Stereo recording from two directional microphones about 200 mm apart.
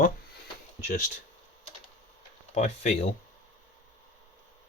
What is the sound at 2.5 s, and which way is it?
Speech, 35° left (ahead or behind).